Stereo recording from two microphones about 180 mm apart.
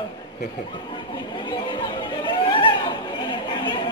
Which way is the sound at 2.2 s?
25° left (ahead or behind).